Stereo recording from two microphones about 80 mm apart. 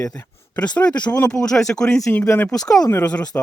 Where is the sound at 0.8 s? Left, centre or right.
Centre.